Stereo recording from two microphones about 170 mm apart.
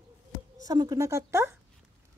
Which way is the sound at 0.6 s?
20° right (ahead or behind).